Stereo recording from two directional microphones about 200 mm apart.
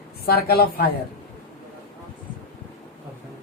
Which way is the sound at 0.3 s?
50° left (ahead or behind).